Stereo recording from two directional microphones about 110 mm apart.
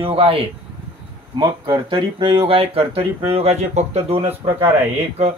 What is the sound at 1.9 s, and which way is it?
Speech, 50° right (ahead or behind).